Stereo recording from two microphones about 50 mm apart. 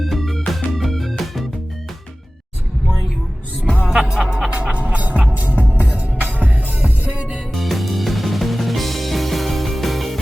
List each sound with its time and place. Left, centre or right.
0.0 s music: centre
4.0 s music: centre
7.5 s music: centre